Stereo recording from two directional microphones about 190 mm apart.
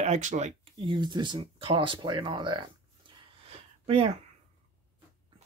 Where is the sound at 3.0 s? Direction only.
25° right (ahead or behind).